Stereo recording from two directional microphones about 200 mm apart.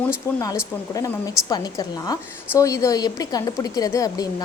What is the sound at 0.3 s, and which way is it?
A woman's voice, 15° left (ahead or behind).